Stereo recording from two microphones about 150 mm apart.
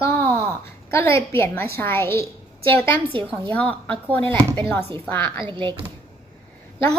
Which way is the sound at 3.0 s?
35° right (ahead or behind).